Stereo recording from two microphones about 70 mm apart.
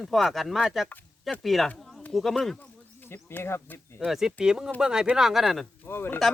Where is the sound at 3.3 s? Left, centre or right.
Left.